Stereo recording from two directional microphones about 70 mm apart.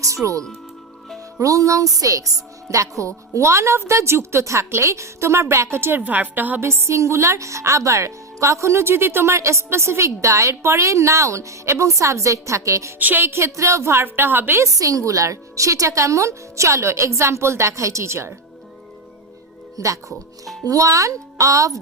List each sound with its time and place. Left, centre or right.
0.0 s a woman's voice: right
6.0 s a woman's voice: right
6.6 s a woman's voice: right
13.0 s a woman's voice: right
14.6 s a woman's voice: right
19.7 s a woman's voice: right